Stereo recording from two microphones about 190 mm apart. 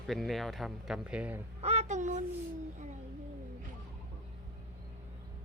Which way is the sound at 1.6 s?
35° right (ahead or behind).